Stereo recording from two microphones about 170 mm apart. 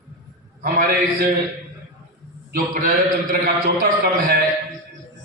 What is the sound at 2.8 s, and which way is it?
Speech, 55° right (ahead or behind).